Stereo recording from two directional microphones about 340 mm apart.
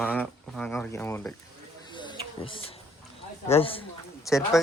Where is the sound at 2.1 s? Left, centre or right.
Centre.